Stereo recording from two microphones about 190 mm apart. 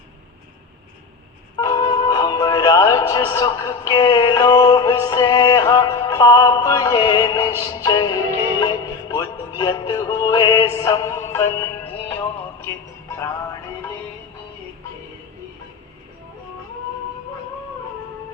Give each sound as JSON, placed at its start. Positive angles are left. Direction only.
{"t": 1.5, "sound": "music", "side_deg": 20}